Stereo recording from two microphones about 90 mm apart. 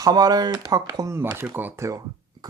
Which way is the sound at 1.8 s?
40° right (ahead or behind).